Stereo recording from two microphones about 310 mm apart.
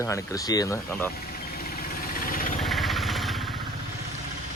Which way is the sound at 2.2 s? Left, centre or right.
Left.